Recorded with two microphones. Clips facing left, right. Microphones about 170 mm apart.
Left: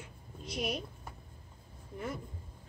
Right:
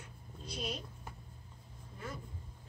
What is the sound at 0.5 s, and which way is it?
Speech, 70° left (ahead or behind).